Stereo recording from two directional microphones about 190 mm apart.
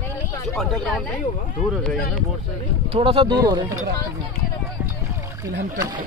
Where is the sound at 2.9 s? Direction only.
30° right (ahead or behind).